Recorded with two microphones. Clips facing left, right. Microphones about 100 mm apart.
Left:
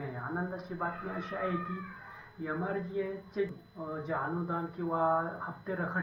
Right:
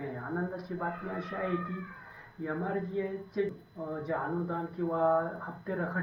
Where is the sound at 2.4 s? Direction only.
10° left (ahead or behind).